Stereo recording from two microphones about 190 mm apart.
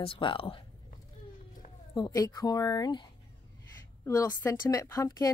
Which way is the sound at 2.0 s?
20° left (ahead or behind).